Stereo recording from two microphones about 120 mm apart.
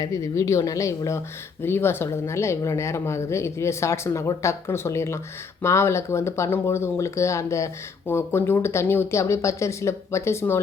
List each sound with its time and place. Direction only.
0.0 s speech: 25° left (ahead or behind)